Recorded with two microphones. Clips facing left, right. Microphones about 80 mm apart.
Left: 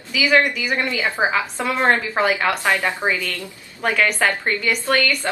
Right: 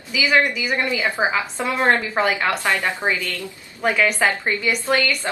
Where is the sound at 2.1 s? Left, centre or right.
Centre.